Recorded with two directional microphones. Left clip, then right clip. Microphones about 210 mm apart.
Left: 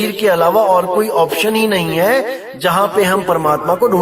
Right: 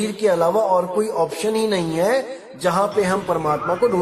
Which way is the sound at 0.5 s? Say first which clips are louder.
Left 6 dB; 45° left (ahead or behind).